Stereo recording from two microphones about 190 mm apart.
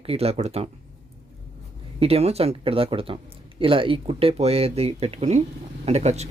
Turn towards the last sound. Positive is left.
turn(degrees=-35)  # may be behind; listen again after turning